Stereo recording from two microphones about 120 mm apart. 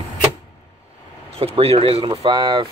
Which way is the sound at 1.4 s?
55° right (ahead or behind).